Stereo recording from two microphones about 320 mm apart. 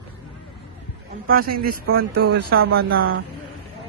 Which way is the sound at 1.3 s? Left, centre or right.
Right.